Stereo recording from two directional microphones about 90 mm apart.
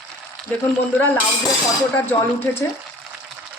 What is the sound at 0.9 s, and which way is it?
A woman's voice, 20° left (ahead or behind).